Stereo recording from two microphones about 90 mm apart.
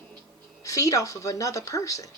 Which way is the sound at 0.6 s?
40° left (ahead or behind).